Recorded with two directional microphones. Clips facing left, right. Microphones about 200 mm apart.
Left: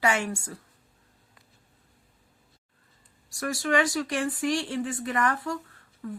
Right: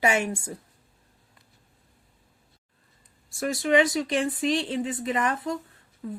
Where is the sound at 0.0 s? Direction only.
20° right (ahead or behind).